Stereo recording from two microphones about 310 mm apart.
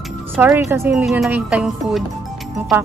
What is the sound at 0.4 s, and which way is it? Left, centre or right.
Speech, centre.